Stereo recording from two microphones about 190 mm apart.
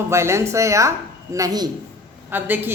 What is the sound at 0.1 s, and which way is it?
A woman's voice, 15° right (ahead or behind).